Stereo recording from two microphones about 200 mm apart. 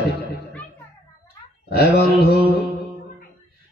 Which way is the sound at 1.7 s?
55° left (ahead or behind).